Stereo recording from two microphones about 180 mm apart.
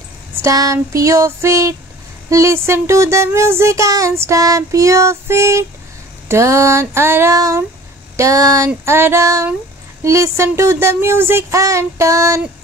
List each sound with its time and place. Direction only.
0.4 s speech: 20° right (ahead or behind)